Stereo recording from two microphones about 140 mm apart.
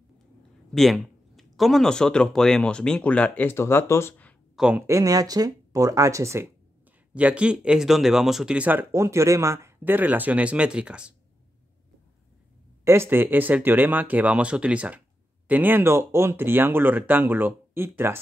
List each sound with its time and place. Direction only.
0.7 s speech: centre (ahead or behind)
4.6 s speech: 5° right (ahead or behind)
4.8 s speech: 25° right (ahead or behind)
7.2 s speech: 10° right (ahead or behind)
12.8 s speech: 20° right (ahead or behind)